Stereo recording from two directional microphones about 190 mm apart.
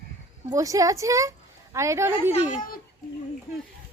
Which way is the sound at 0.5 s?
15° right (ahead or behind).